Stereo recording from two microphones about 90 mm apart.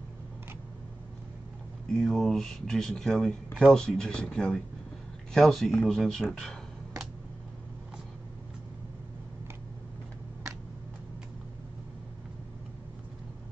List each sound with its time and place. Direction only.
1.9 s speech: 5° left (ahead or behind)